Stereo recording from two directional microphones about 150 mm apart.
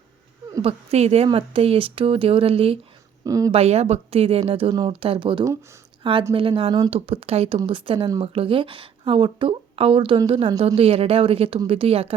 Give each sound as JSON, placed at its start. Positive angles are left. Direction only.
{"t": 0.6, "sound": "a woman's voice", "side_deg": -40}
{"t": 3.2, "sound": "speech", "side_deg": -25}
{"t": 3.5, "sound": "a woman's voice", "side_deg": -45}